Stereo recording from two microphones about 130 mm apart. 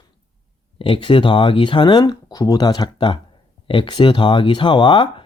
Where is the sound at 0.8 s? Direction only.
40° left (ahead or behind).